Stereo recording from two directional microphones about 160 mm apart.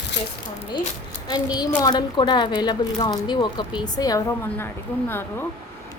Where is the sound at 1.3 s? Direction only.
25° left (ahead or behind).